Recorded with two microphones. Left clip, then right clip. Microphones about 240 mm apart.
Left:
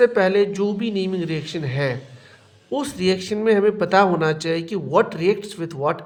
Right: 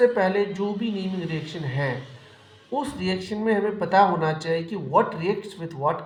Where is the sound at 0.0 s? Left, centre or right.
Left.